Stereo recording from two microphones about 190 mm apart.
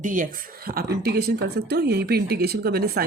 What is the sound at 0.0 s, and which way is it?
Speech, 45° right (ahead or behind).